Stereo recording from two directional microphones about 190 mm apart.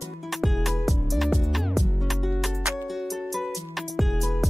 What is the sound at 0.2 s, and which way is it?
Music, centre (ahead or behind).